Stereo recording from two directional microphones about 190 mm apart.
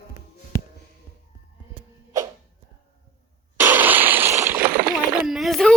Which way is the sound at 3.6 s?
10° right (ahead or behind).